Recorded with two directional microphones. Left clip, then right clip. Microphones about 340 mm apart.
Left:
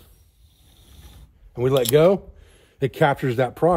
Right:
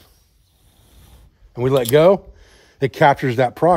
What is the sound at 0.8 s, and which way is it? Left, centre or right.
Pulleys, centre.